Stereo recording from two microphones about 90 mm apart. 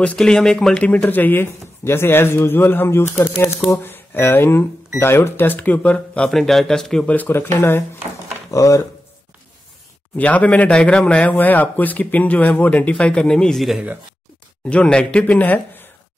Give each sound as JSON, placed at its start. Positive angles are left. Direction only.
{"t": 0.0, "sound": "speech", "side_deg": 10}
{"t": 7.2, "sound": "speech", "side_deg": 20}
{"t": 8.5, "sound": "speech", "side_deg": 35}
{"t": 10.1, "sound": "speech", "side_deg": 15}
{"t": 14.7, "sound": "speech", "side_deg": 10}